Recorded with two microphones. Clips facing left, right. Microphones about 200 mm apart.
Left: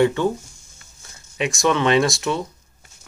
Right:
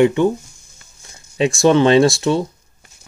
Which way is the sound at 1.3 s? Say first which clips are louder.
Right 7 dB; 30° right (ahead or behind).